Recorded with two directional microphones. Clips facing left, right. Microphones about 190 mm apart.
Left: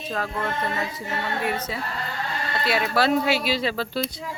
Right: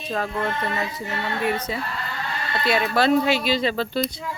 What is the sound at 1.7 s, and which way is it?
Speech, 5° left (ahead or behind).